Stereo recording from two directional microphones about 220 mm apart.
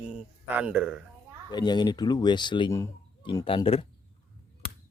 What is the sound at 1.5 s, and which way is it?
Speech, 20° left (ahead or behind).